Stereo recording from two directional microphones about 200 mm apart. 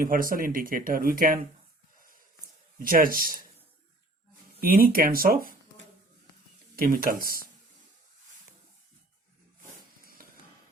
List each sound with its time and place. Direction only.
0.0 s speech: 45° right (ahead or behind)
2.8 s speech: 45° right (ahead or behind)
4.6 s speech: 45° right (ahead or behind)
6.7 s speech: 45° right (ahead or behind)
10.0 s a sound: 45° right (ahead or behind)